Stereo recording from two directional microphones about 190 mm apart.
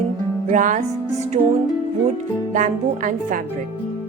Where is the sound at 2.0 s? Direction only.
40° right (ahead or behind).